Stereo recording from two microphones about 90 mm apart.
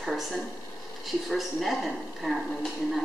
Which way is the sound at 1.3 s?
Centre (ahead or behind).